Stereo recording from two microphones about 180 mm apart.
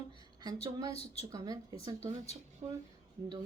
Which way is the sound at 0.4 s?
20° right (ahead or behind).